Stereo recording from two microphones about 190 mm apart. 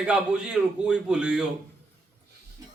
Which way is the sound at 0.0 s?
5° right (ahead or behind).